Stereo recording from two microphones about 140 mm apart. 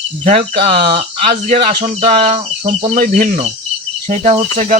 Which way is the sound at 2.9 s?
75° right (ahead or behind).